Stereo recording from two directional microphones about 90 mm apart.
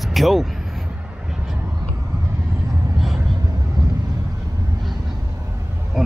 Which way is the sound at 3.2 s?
40° right (ahead or behind).